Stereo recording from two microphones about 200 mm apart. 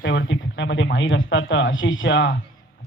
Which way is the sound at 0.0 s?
65° left (ahead or behind).